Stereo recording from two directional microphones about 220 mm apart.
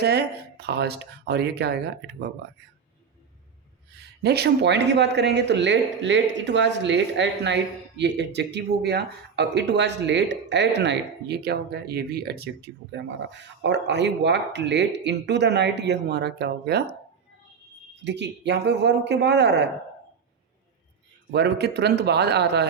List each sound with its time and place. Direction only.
0.0 s speech: 50° right (ahead or behind)
3.9 s speech: 50° right (ahead or behind)
18.0 s speech: 50° right (ahead or behind)
21.2 s speech: 50° right (ahead or behind)